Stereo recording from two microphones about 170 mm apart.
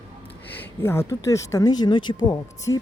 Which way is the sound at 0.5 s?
10° left (ahead or behind).